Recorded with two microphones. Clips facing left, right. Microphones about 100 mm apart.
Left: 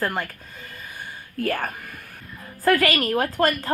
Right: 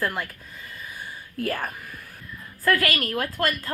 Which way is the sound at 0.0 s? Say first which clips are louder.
Left 2 dB; 60° left (ahead or behind).